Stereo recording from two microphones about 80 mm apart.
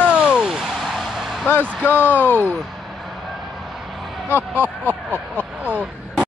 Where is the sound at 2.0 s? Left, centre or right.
Right.